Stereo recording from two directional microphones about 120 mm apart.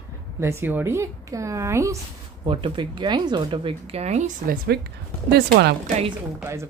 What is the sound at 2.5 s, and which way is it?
Speech, 45° right (ahead or behind).